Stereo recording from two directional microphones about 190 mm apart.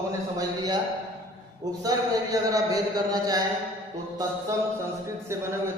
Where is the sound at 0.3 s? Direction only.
20° right (ahead or behind).